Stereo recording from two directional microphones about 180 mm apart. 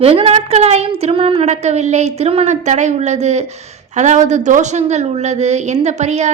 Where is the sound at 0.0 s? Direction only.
35° right (ahead or behind).